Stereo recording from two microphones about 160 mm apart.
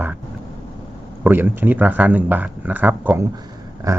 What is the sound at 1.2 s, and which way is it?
Speech, 15° right (ahead or behind).